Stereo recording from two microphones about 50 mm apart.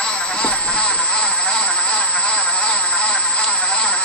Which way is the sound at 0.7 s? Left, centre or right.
Left.